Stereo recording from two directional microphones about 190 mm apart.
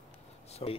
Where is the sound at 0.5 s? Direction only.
30° left (ahead or behind).